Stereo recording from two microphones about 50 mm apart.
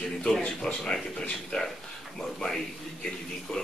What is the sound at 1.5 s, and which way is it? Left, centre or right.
Speech, centre.